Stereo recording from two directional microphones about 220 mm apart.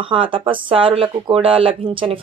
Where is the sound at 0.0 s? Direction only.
25° right (ahead or behind).